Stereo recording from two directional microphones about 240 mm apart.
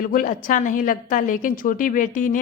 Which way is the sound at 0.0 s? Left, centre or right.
Left.